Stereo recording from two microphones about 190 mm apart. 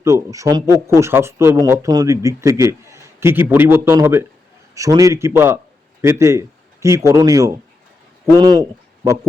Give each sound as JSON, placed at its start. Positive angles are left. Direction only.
{"t": 0.0, "sound": "a man's voice", "side_deg": -15}